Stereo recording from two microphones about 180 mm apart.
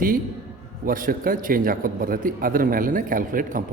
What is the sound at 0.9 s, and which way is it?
A man's voice, 50° right (ahead or behind).